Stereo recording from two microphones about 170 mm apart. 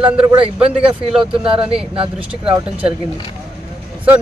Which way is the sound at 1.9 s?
30° right (ahead or behind).